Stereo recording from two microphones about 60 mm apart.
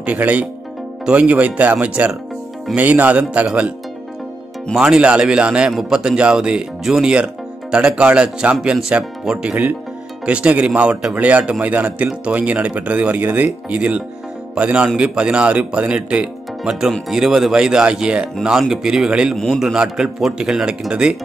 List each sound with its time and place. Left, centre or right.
0.0 s speech: right
4.7 s speech: centre
5.7 s speech: centre
17.1 s speech: centre
19.3 s a man's voice: centre
19.6 s speech: centre